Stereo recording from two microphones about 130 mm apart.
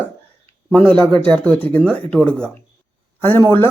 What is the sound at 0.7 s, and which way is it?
Speech, 10° left (ahead or behind).